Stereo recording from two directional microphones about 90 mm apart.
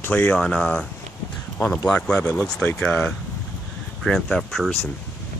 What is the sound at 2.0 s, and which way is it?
Speech, 10° left (ahead or behind).